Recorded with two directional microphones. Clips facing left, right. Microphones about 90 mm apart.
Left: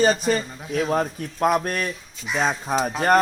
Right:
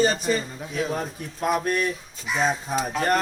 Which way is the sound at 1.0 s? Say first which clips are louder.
Left 7 dB; 50° left (ahead or behind).